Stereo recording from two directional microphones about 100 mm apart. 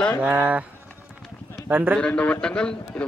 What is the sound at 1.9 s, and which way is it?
A man's voice, 10° left (ahead or behind).